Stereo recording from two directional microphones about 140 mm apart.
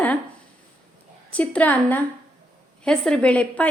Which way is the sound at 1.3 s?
10° left (ahead or behind).